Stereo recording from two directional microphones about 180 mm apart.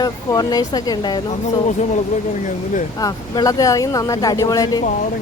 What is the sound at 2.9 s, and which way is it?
Speech, 20° left (ahead or behind).